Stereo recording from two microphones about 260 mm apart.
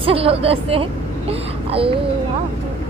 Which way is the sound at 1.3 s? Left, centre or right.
Right.